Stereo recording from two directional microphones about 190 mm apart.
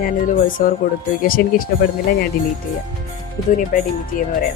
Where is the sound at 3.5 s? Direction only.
45° left (ahead or behind).